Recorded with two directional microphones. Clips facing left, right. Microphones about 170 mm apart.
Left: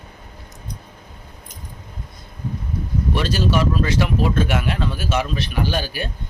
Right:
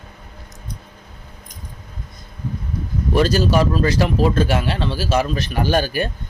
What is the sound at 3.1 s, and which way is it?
Speech, 40° right (ahead or behind).